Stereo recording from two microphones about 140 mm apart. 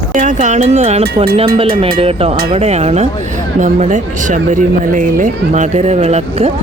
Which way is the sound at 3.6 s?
60° right (ahead or behind).